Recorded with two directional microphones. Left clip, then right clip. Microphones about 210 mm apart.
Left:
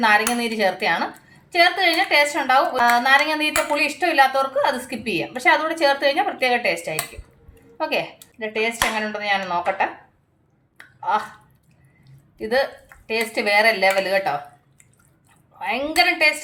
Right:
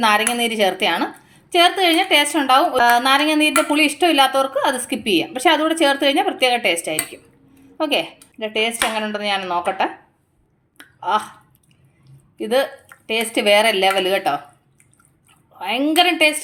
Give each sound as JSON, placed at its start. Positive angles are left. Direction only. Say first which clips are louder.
{"t": 0.0, "sound": "a woman's voice", "louder": "right 1 dB", "side_deg": -40}
{"t": 11.0, "sound": "speech", "louder": "right 2 dB", "side_deg": -40}
{"t": 12.4, "sound": "a woman's voice", "louder": "right 2 dB", "side_deg": -35}
{"t": 15.5, "sound": "a woman's voice", "louder": "right 3 dB", "side_deg": -35}